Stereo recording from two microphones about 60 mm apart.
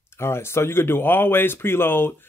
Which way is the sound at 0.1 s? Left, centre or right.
Left.